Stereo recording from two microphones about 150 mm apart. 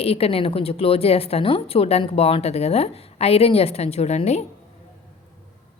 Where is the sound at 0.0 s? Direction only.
40° left (ahead or behind).